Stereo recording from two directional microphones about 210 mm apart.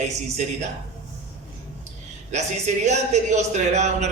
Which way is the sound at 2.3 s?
35° right (ahead or behind).